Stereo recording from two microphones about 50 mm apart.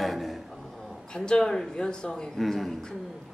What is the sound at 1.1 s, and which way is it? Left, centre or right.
Speech, centre.